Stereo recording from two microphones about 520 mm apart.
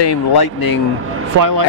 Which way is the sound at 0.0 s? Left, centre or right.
Left.